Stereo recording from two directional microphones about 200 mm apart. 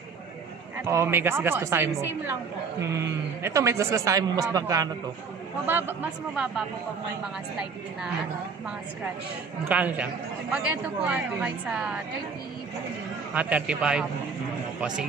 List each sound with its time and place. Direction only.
0.7 s a man's voice: 10° right (ahead or behind)
9.7 s a man's voice: 5° right (ahead or behind)
13.3 s a woman's voice: 5° right (ahead or behind)